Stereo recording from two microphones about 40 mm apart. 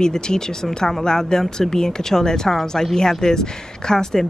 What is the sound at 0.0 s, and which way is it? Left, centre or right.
Speech, centre.